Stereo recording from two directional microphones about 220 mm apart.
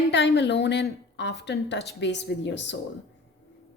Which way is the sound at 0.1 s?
50° left (ahead or behind).